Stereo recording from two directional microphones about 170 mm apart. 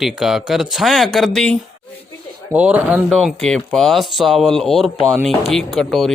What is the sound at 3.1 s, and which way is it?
Speech, centre (ahead or behind).